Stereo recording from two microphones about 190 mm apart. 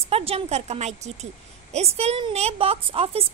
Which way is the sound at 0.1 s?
30° right (ahead or behind).